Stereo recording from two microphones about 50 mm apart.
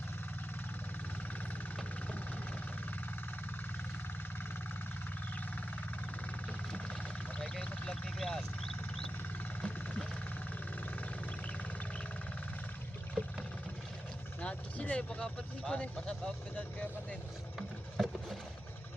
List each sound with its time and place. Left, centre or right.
7.3 s vehicle: left
9.6 s vehicle: left
14.4 s vehicle: left
15.2 s speech: centre
16.6 s vehicle: left
17.6 s a sound: centre